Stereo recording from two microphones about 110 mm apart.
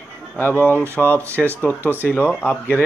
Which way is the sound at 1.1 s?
25° right (ahead or behind).